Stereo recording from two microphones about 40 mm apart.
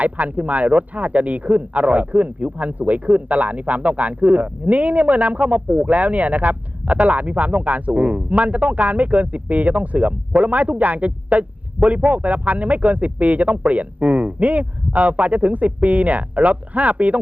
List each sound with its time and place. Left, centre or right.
0.0 s speech: right